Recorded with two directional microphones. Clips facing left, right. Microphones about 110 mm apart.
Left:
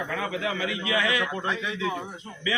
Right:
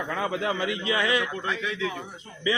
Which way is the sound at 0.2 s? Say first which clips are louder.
Right 4 dB; 30° right (ahead or behind).